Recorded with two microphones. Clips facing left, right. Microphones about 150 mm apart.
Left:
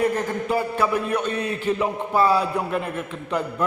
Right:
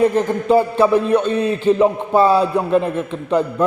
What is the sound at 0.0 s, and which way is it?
Speech, 25° right (ahead or behind).